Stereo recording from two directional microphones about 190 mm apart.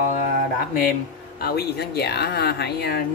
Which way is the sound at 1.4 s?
55° left (ahead or behind).